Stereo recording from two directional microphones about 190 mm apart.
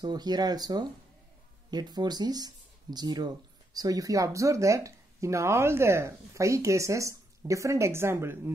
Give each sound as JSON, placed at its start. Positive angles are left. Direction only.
{"t": 0.0, "sound": "speech", "side_deg": -20}